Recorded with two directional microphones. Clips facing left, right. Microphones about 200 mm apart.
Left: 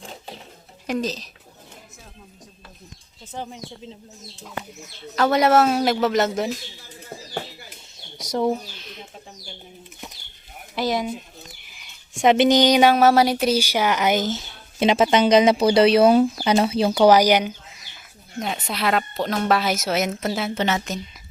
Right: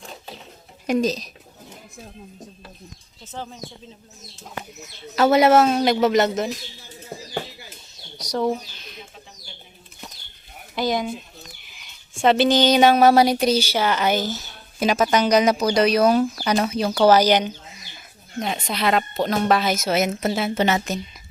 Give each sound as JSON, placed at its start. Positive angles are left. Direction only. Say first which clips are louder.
{"t": 0.9, "sound": "speech", "louder": "right 4 dB", "side_deg": -15}
{"t": 3.3, "sound": "speech", "louder": "left 1 dB", "side_deg": 15}
{"t": 5.1, "sound": "speech", "louder": "right 2 dB", "side_deg": -5}
{"t": 8.2, "sound": "bird", "louder": "left 1 dB", "side_deg": 25}
{"t": 10.8, "sound": "speech", "louder": "even", "side_deg": 5}
{"t": 12.2, "sound": "speech", "louder": "left 1 dB", "side_deg": 15}
{"t": 12.9, "sound": "speech", "louder": "right 1 dB", "side_deg": 0}
{"t": 17.1, "sound": "speech", "louder": "right 1 dB", "side_deg": 10}